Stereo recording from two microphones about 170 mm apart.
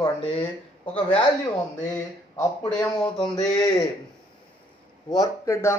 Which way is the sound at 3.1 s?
20° left (ahead or behind).